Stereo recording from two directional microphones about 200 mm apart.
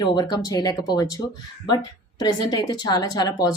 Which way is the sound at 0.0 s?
20° left (ahead or behind).